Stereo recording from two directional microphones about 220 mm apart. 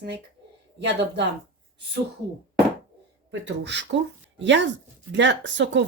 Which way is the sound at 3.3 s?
55° right (ahead or behind).